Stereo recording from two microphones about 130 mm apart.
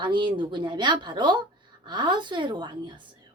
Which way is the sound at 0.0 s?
35° right (ahead or behind).